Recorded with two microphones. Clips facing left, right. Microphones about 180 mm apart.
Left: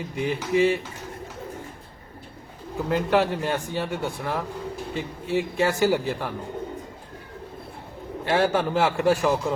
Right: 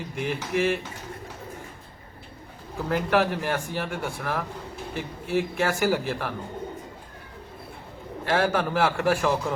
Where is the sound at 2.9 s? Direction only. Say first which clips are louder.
Left 1 dB; 20° left (ahead or behind).